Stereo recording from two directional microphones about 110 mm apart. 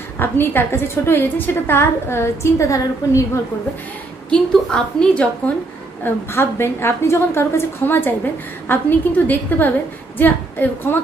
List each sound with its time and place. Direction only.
0.2 s a woman's voice: 20° left (ahead or behind)
4.3 s a woman's voice: 10° left (ahead or behind)
6.0 s a woman's voice: 20° left (ahead or behind)